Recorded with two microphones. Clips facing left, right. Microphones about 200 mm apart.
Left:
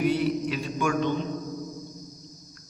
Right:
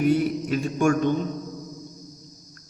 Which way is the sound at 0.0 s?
45° right (ahead or behind).